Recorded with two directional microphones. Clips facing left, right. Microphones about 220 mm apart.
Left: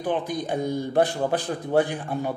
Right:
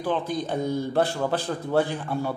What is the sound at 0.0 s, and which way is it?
A man's voice, 15° left (ahead or behind).